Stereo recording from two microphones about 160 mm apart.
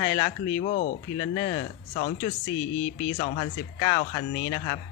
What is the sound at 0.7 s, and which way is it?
Speech, 50° left (ahead or behind).